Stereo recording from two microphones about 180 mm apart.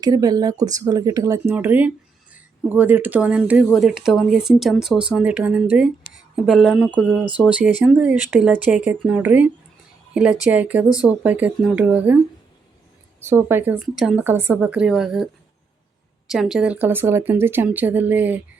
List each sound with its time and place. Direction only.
0.0 s speech: 20° right (ahead or behind)
13.2 s speech: 15° right (ahead or behind)
16.3 s speech: centre (ahead or behind)